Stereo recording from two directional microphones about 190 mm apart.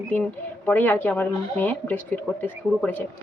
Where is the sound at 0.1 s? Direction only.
10° left (ahead or behind).